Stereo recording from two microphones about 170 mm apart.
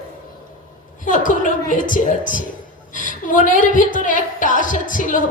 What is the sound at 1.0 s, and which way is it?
A woman's voice, 50° left (ahead or behind).